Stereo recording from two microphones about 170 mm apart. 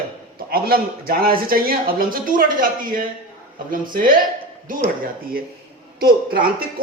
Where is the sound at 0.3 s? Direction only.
60° right (ahead or behind).